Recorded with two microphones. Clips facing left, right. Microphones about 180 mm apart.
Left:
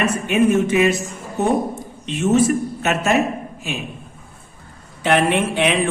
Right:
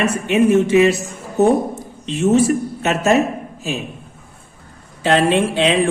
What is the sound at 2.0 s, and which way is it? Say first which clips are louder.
Speech: right 2 dB; 30° right (ahead or behind).